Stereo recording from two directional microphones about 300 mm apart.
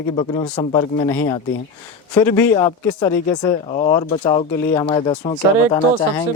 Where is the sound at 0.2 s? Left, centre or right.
Centre.